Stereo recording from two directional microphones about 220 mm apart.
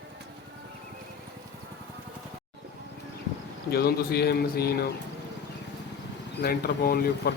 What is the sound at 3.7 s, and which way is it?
Speech, 45° left (ahead or behind).